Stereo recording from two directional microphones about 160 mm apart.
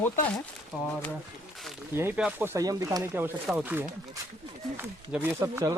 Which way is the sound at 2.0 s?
15° right (ahead or behind).